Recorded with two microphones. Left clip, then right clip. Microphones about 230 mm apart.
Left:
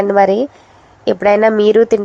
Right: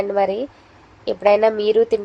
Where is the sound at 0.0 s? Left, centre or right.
Left.